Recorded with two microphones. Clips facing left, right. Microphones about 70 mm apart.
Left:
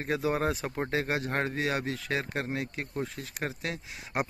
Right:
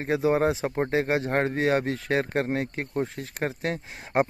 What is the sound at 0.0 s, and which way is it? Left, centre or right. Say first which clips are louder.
Speech: right 6 dB; right.